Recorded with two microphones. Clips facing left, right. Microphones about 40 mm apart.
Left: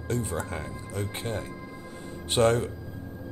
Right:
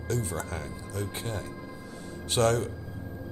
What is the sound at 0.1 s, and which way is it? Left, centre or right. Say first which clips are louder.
A man's voice: left 2 dB; left.